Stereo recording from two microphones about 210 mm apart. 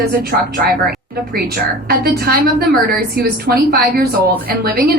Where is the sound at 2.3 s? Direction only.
45° right (ahead or behind).